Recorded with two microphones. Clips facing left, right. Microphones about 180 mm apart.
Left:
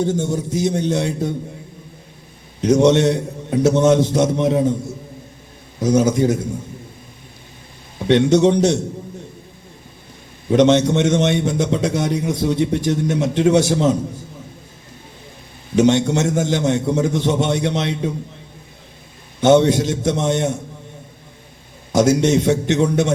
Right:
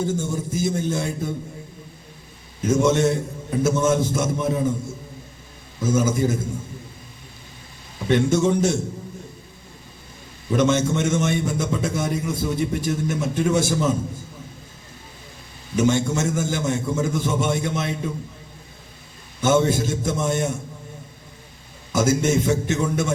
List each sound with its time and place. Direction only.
0.0 s a man's voice: 70° left (ahead or behind)
2.6 s a man's voice: 75° left (ahead or behind)
6.0 s a man's voice: 75° left (ahead or behind)
8.0 s a man's voice: 75° left (ahead or behind)
10.5 s a man's voice: 70° left (ahead or behind)
15.7 s a man's voice: 75° left (ahead or behind)
19.4 s a man's voice: 70° left (ahead or behind)
21.9 s a man's voice: 75° left (ahead or behind)